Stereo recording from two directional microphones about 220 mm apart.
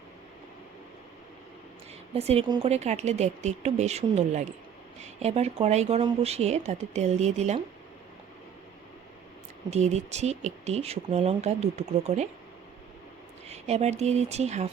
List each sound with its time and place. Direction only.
2.1 s speech: 25° right (ahead or behind)
9.6 s speech: 30° right (ahead or behind)
13.5 s speech: 30° right (ahead or behind)